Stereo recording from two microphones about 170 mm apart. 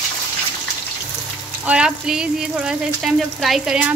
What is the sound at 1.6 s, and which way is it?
Speech, 5° right (ahead or behind).